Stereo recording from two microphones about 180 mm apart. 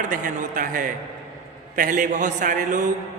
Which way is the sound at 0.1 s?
50° right (ahead or behind).